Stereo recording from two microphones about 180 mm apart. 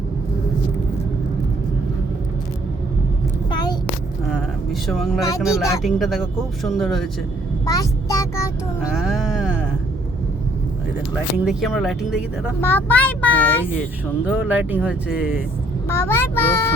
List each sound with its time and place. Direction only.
3.5 s a sound: 20° left (ahead or behind)
4.3 s vehicle: centre (ahead or behind)
5.4 s speech: 5° right (ahead or behind)
7.6 s a sound: 20° left (ahead or behind)
8.8 s music: 5° right (ahead or behind)
11.3 s speech: 5° right (ahead or behind)
12.6 s speech: 10° left (ahead or behind)
14.3 s speech: 10° right (ahead or behind)
15.9 s speech: 15° left (ahead or behind)